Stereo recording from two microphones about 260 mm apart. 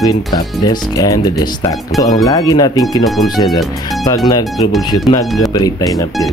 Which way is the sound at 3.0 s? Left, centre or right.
Centre.